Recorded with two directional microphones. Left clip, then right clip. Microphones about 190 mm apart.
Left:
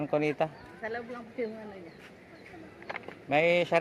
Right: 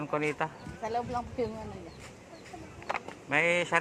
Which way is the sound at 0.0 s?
60° left (ahead or behind).